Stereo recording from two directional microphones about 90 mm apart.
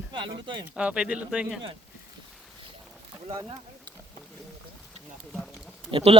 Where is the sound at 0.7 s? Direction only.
10° right (ahead or behind).